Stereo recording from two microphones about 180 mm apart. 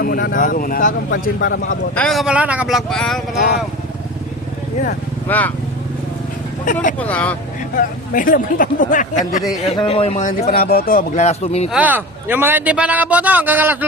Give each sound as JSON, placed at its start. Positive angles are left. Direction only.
{"t": 0.0, "sound": "speech", "side_deg": 55}
{"t": 2.0, "sound": "speech", "side_deg": 0}
{"t": 5.3, "sound": "speech", "side_deg": 10}
{"t": 6.7, "sound": "speech", "side_deg": 45}
{"t": 7.1, "sound": "speech", "side_deg": 5}
{"t": 7.8, "sound": "speech", "side_deg": 50}
{"t": 9.6, "sound": "speech", "side_deg": 30}
{"t": 11.7, "sound": "speech", "side_deg": -10}